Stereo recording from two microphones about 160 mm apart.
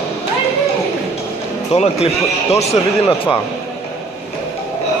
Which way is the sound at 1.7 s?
40° left (ahead or behind).